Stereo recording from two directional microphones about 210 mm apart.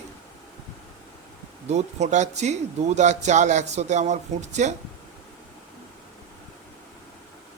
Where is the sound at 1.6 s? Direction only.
30° right (ahead or behind).